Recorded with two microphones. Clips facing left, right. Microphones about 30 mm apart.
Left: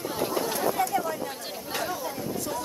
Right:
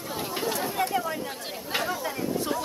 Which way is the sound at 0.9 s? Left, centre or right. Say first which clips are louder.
Even; centre.